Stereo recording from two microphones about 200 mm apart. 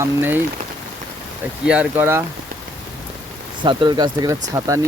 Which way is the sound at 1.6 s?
5° right (ahead or behind).